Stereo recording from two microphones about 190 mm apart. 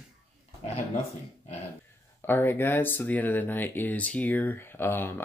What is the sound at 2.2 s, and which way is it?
Speech, 10° left (ahead or behind).